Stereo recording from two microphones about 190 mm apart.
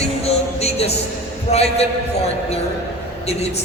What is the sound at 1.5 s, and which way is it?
Speech, 35° left (ahead or behind).